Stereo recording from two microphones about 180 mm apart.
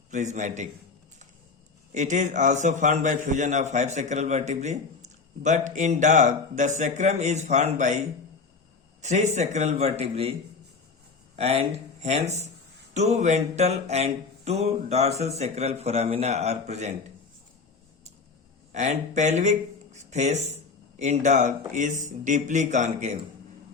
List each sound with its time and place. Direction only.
0.1 s a man's voice: 40° right (ahead or behind)
1.9 s a man's voice: 40° right (ahead or behind)
11.3 s a man's voice: 35° right (ahead or behind)
18.7 s a man's voice: 40° right (ahead or behind)